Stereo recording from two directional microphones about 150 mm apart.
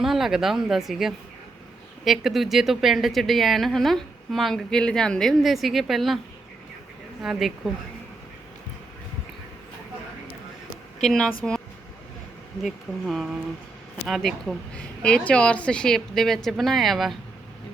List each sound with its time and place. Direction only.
0.0 s speech: centre (ahead or behind)
7.2 s speech: centre (ahead or behind)
11.0 s speech: centre (ahead or behind)
12.6 s speech: centre (ahead or behind)